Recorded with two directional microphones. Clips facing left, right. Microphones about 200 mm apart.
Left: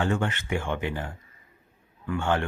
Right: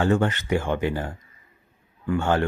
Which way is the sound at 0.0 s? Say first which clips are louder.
Right 5 dB; 40° right (ahead or behind).